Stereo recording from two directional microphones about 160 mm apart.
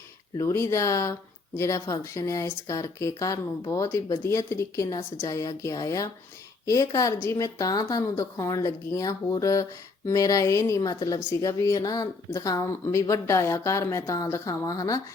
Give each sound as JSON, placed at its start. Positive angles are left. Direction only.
{"t": 0.3, "sound": "a woman's voice", "side_deg": 15}